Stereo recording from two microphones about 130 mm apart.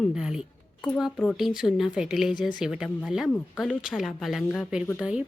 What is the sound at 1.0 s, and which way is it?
Speech, centre (ahead or behind).